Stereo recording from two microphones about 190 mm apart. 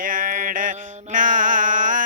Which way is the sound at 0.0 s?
45° right (ahead or behind).